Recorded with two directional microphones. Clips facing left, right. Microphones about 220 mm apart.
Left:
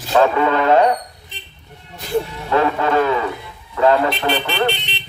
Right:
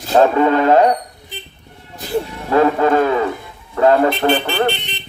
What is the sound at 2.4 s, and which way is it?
Music, 40° right (ahead or behind).